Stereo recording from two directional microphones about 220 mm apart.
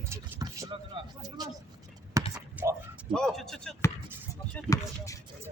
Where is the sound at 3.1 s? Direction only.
Centre (ahead or behind).